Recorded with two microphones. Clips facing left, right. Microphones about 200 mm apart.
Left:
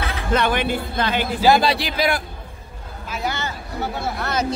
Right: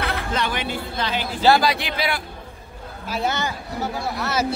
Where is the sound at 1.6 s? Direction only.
35° left (ahead or behind).